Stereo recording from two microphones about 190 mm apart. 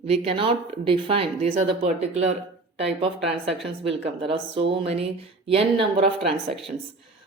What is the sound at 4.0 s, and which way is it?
Speech, 30° right (ahead or behind).